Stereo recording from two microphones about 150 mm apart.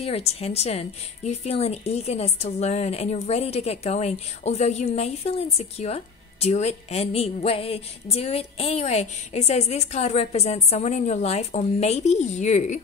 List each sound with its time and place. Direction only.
0.0 s a woman's voice: 45° left (ahead or behind)